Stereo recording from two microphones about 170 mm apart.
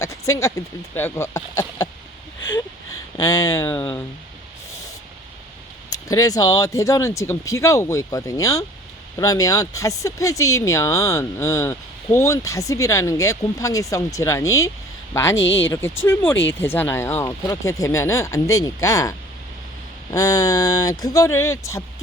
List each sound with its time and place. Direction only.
0.0 s speech: 20° left (ahead or behind)
3.2 s speech: 20° left (ahead or behind)
5.9 s speech: 20° left (ahead or behind)
20.1 s speech: 20° left (ahead or behind)